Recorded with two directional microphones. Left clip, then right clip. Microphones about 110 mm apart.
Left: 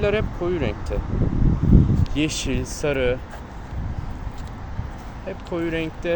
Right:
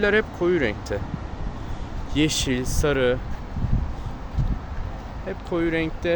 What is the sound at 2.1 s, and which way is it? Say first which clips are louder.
Speech: right 5 dB; 50° right (ahead or behind).